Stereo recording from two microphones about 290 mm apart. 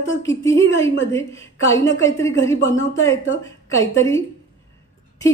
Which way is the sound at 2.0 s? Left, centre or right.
Centre.